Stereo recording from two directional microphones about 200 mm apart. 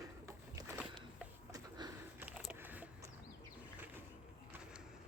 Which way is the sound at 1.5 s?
20° right (ahead or behind).